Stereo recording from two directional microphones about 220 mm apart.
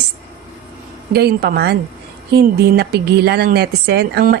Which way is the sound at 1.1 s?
45° right (ahead or behind).